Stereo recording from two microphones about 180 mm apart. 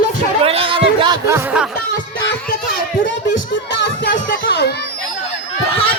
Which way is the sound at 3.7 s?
80° left.